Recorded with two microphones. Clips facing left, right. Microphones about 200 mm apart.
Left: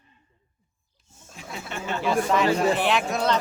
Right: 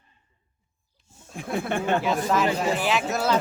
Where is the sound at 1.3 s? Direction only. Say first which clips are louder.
Right 9 dB; 55° right (ahead or behind).